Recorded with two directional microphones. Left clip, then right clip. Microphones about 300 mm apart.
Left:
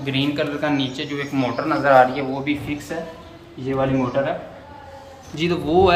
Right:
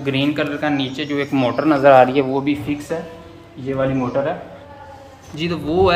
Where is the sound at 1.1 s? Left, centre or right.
Right.